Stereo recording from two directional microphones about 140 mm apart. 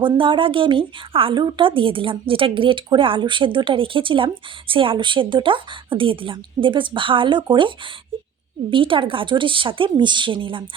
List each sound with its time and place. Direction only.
0.0 s a woman's voice: 35° right (ahead or behind)
8.7 s a woman's voice: 40° right (ahead or behind)